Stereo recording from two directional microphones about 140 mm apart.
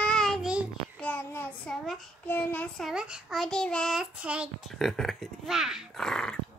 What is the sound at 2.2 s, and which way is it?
Child singing, 15° left (ahead or behind).